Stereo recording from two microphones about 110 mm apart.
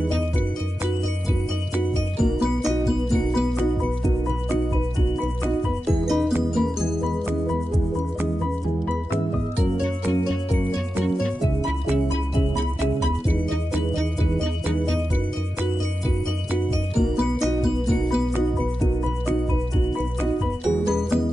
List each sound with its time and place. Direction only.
2.2 s music: centre (ahead or behind)
5.9 s music: centre (ahead or behind)
20.8 s music: 5° right (ahead or behind)